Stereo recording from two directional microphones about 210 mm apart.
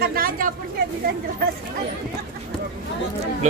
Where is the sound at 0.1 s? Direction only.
45° right (ahead or behind).